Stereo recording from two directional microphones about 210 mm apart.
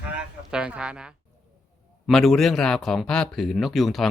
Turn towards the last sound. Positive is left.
turn(degrees=0)  # may be behind; listen again after turning